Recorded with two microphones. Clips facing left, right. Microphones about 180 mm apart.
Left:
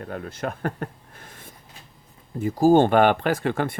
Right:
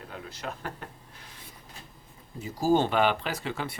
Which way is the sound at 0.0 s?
55° left (ahead or behind).